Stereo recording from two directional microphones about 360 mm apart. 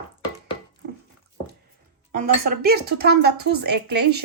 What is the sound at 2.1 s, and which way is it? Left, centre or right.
Speech, right.